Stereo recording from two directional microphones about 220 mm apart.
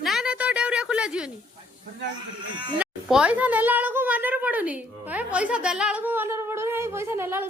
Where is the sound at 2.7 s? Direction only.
5° right (ahead or behind).